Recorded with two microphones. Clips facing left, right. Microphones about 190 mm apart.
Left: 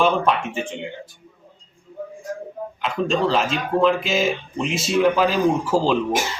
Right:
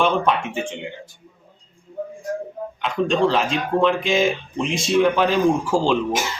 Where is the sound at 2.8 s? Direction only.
Centre (ahead or behind).